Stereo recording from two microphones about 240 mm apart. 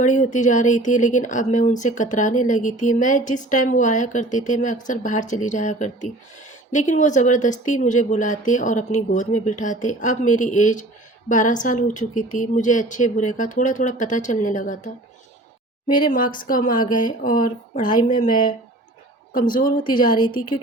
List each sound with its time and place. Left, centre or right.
0.0 s speech: left
16.0 s speech: left